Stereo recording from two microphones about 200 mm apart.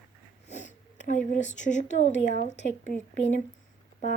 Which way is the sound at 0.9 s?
35° left (ahead or behind).